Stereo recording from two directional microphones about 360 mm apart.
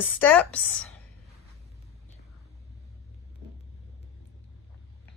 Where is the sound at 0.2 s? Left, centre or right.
Centre.